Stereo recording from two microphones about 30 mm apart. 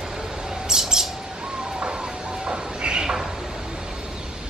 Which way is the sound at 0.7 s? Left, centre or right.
Centre.